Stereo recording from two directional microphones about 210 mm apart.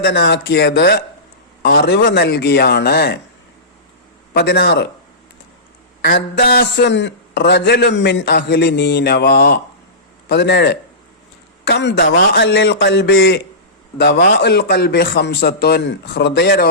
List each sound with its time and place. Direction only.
0.0 s a man's voice: 55° left (ahead or behind)
4.4 s a man's voice: 50° left (ahead or behind)
6.0 s a man's voice: 50° left (ahead or behind)